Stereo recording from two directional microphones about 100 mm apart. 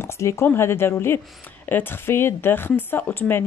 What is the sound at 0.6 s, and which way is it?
Speech, 25° left (ahead or behind).